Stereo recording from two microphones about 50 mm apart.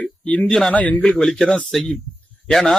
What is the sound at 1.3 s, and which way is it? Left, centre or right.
A man's voice, centre.